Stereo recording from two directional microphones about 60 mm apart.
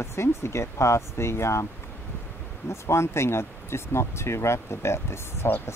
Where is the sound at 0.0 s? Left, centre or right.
Left.